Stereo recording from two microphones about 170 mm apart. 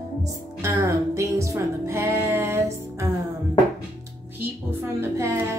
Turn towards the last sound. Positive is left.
turn(degrees=-15)  # may be behind; listen again after turning